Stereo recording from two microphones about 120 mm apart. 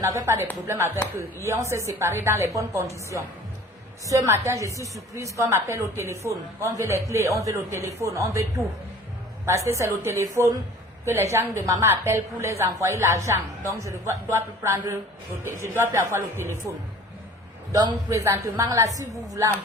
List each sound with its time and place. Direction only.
0.0 s a woman's voice: 25° right (ahead or behind)